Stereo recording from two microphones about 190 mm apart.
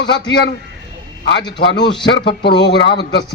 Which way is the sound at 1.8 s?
25° left (ahead or behind).